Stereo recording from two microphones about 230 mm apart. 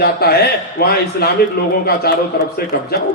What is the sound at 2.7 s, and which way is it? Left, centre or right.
Speech, left.